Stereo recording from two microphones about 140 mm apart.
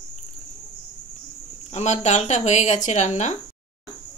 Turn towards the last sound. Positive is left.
turn(degrees=55)  # may be behind; listen again after turning